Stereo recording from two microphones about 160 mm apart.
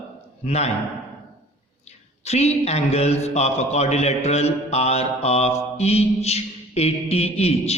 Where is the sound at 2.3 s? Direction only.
45° left (ahead or behind).